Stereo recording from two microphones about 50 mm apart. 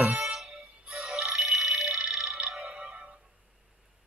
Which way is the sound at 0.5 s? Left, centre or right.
Right.